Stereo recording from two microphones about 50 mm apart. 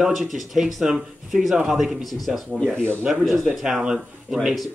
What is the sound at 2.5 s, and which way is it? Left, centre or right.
Speech, centre.